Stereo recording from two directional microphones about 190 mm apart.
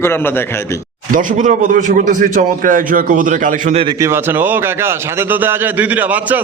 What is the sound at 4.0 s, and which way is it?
A man's voice, 10° right (ahead or behind).